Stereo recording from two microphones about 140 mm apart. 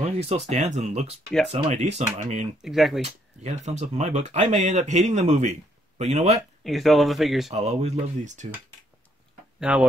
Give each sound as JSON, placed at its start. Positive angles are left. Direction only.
{"t": 0.0, "sound": "speech", "side_deg": -50}
{"t": 2.6, "sound": "speech", "side_deg": 0}
{"t": 3.0, "sound": "speech", "side_deg": -55}
{"t": 6.6, "sound": "speech", "side_deg": 0}
{"t": 7.5, "sound": "speech", "side_deg": -50}
{"t": 9.6, "sound": "speech", "side_deg": -10}